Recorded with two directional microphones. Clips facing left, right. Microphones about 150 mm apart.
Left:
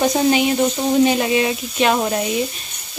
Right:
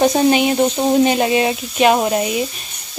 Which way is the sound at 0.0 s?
30° right (ahead or behind).